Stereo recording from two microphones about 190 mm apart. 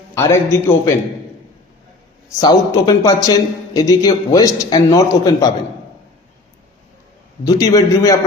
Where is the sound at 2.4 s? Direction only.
20° left (ahead or behind).